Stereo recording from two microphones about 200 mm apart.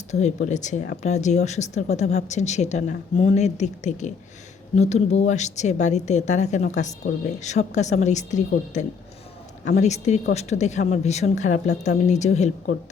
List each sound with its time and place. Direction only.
0.1 s speech: 35° left (ahead or behind)